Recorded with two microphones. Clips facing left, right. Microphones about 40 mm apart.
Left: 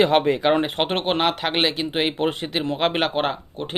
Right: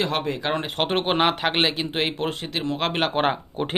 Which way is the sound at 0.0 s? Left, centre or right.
Left.